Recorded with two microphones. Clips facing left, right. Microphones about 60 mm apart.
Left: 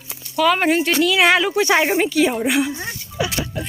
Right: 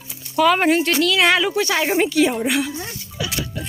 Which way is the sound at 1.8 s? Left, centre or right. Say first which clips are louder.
Even; centre.